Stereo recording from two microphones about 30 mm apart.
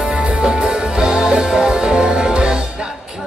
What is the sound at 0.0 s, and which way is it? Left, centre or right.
Music, right.